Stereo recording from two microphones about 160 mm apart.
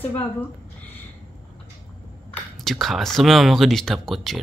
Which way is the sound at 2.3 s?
Centre (ahead or behind).